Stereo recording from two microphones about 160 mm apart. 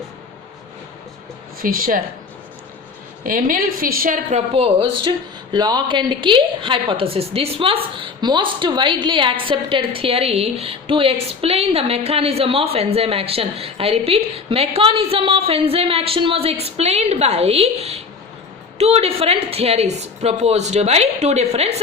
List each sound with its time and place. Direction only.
1.6 s speech: 60° right (ahead or behind)
3.2 s a woman's voice: 60° right (ahead or behind); by 21.8 s 40° right (ahead or behind)